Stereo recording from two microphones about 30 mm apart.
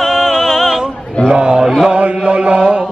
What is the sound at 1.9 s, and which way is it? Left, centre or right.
Chant, right.